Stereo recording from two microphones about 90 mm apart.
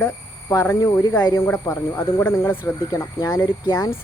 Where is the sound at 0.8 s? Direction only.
40° left (ahead or behind).